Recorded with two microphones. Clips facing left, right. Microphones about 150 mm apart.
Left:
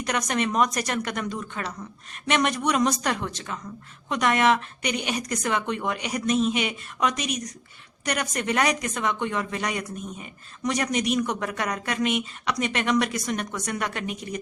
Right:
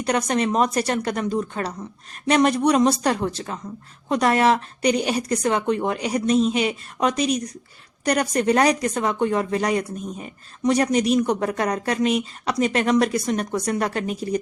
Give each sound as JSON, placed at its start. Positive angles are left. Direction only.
{"t": 0.0, "sound": "speech", "side_deg": -30}